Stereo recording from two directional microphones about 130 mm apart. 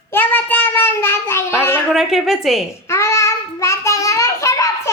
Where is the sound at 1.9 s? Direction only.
5° right (ahead or behind).